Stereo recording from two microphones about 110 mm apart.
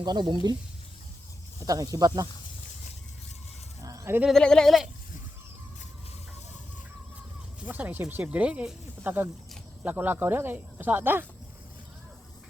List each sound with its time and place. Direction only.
0.0 s speech: 40° right (ahead or behind)
1.6 s speech: 35° right (ahead or behind)
3.8 s sheep: 30° right (ahead or behind)
4.3 s a sound: 5° left (ahead or behind)
7.7 s speech: 15° right (ahead or behind)